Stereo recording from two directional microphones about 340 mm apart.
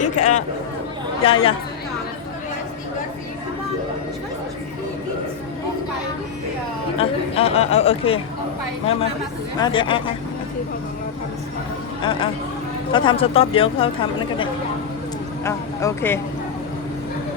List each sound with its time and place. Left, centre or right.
0.0 s speech: left
6.9 s speech: centre
9.6 s speech: centre
12.9 s speech: centre